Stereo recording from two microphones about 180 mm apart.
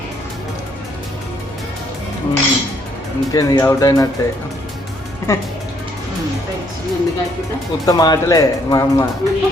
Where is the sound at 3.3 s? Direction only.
15° left (ahead or behind).